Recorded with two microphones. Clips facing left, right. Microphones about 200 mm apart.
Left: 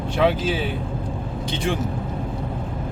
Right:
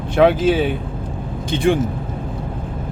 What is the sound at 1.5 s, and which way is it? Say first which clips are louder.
Speech: right 9 dB; 55° right (ahead or behind).